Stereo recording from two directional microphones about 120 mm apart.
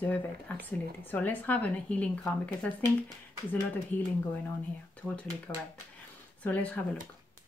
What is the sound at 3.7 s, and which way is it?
Speech, 15° left (ahead or behind).